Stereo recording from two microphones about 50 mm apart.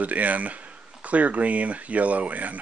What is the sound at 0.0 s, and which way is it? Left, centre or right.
Speech, right.